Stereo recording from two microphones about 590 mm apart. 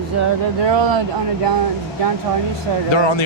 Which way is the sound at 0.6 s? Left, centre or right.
Right.